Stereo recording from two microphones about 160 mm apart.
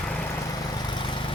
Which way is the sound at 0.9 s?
30° left (ahead or behind).